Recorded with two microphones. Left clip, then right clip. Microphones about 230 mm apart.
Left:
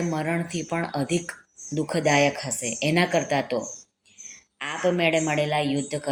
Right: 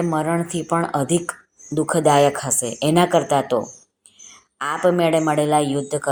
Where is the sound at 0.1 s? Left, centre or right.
Right.